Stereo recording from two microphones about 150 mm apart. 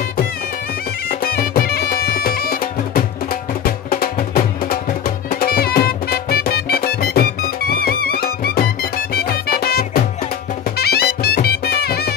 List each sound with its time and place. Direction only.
1.2 s music: 85° left